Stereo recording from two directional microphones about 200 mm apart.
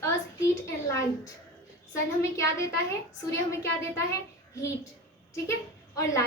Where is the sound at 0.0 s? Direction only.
15° left (ahead or behind).